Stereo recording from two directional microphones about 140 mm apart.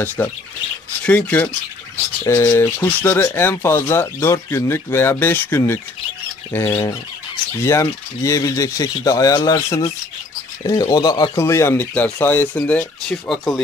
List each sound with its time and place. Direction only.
0.2 s speech: 20° left (ahead or behind)